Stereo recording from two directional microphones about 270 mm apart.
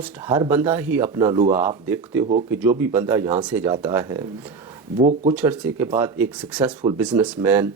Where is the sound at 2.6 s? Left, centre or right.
Centre.